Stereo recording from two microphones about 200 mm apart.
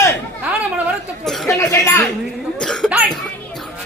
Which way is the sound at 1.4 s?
15° left (ahead or behind).